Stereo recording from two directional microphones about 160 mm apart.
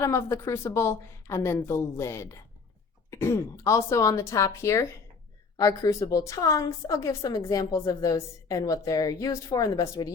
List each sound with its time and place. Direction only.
0.0 s a woman's voice: 15° left (ahead or behind)